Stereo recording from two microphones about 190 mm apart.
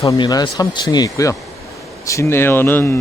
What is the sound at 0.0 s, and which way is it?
Speech, 15° left (ahead or behind).